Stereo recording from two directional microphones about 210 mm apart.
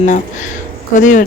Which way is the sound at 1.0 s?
40° left (ahead or behind).